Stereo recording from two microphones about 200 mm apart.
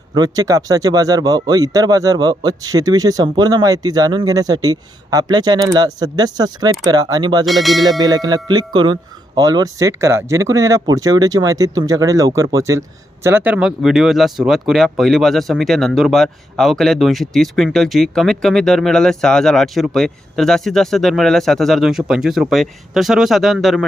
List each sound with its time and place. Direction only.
0.1 s speech: 20° right (ahead or behind)
7.4 s speech: centre (ahead or behind)
7.9 s speech: 20° right (ahead or behind); by 23.8 s centre (ahead or behind)